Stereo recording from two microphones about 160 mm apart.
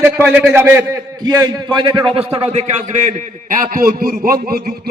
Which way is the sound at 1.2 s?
25° right (ahead or behind).